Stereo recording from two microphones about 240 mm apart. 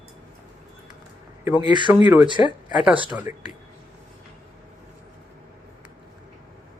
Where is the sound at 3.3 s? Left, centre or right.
Left.